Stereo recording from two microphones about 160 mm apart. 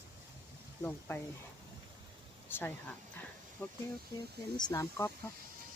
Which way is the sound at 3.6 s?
15° left (ahead or behind).